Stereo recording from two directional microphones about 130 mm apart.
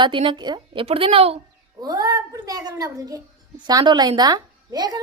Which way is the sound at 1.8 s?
30° right (ahead or behind).